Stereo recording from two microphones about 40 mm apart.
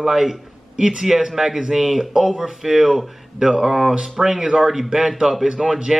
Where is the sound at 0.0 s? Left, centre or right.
Centre.